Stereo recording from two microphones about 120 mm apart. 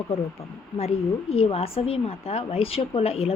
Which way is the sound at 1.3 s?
55° left (ahead or behind).